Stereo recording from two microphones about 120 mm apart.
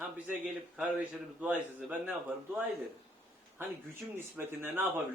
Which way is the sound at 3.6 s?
15° right (ahead or behind).